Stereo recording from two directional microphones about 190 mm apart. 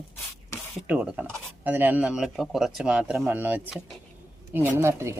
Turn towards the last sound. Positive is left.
turn(degrees=-15)  # may be behind; listen again after turning